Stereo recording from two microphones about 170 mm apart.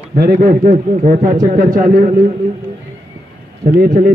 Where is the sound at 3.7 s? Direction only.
55° right (ahead or behind).